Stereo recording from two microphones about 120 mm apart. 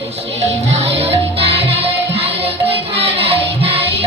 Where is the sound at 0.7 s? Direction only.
55° right (ahead or behind).